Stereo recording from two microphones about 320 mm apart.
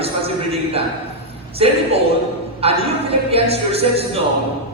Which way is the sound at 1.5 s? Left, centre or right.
Centre.